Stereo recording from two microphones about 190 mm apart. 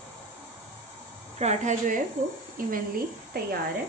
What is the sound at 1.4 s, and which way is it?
A woman's voice, 40° right (ahead or behind).